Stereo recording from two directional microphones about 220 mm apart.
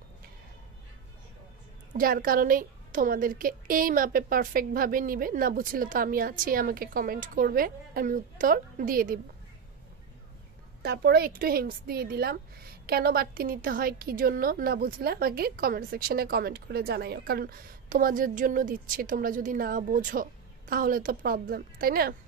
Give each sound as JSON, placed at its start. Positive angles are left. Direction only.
{"t": 2.0, "sound": "a woman's voice", "side_deg": -40}
{"t": 10.8, "sound": "a woman's voice", "side_deg": -45}